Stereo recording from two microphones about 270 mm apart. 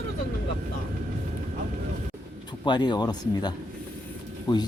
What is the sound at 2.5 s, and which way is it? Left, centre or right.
Speech, centre.